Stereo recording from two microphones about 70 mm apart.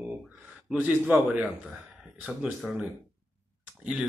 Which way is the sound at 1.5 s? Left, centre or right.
Centre.